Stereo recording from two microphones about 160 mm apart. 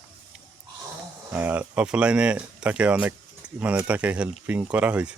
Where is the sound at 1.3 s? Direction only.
10° right (ahead or behind).